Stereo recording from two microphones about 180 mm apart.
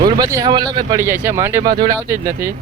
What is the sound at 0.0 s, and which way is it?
Speech, 20° right (ahead or behind).